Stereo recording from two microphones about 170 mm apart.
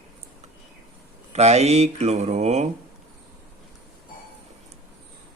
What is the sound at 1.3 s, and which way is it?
Speech, 40° right (ahead or behind).